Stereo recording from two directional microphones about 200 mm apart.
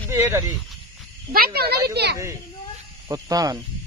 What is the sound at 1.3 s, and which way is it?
Speech, 50° right (ahead or behind).